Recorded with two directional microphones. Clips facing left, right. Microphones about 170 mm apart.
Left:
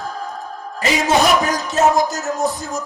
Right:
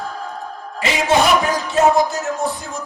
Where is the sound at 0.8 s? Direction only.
40° left (ahead or behind).